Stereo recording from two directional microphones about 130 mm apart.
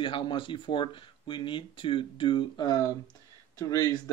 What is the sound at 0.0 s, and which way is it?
Speech, 40° left (ahead or behind).